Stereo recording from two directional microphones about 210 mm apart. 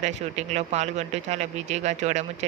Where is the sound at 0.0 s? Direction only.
30° right (ahead or behind).